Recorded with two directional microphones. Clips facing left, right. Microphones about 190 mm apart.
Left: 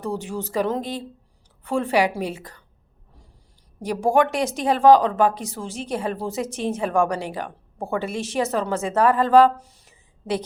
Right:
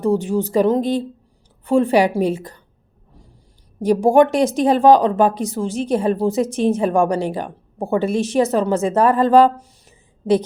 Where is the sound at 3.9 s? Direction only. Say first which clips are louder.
Right 6 dB; 20° right (ahead or behind).